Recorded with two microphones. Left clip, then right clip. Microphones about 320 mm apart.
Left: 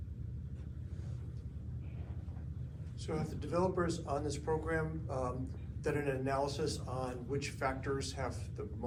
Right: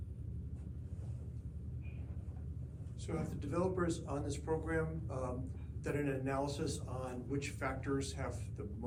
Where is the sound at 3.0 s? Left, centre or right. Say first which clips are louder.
Left 2 dB; centre.